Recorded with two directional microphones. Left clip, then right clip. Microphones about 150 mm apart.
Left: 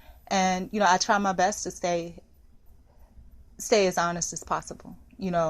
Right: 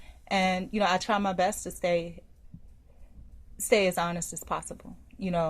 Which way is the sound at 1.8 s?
40° left (ahead or behind).